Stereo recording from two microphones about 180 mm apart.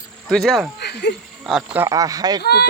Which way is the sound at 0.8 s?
65° left (ahead or behind).